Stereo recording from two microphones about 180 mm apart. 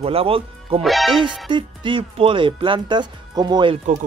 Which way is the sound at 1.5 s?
25° right (ahead or behind).